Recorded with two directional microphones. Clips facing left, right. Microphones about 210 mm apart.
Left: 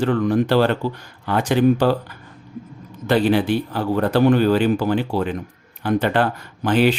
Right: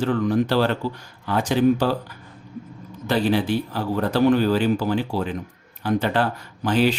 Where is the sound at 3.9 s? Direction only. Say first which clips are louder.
Left 2 dB; 60° left (ahead or behind).